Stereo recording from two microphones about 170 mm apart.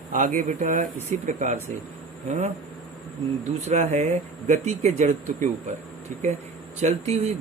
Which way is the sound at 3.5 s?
40° right (ahead or behind).